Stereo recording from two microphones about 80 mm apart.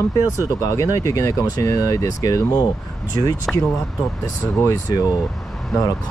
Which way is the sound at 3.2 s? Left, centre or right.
Left.